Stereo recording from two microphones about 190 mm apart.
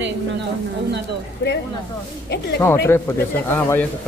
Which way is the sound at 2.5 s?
10° left (ahead or behind).